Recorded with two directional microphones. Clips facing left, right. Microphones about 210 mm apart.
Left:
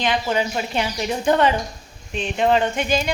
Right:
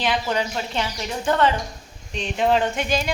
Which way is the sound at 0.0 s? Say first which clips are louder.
Left 2 dB; centre (ahead or behind).